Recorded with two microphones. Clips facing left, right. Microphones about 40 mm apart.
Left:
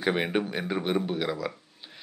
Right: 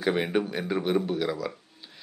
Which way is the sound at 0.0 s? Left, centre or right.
Centre.